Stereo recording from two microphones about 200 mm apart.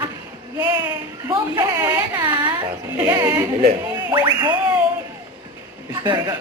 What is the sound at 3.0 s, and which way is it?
Speech, 10° right (ahead or behind).